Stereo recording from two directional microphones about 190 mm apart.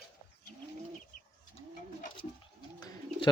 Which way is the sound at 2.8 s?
20° left (ahead or behind).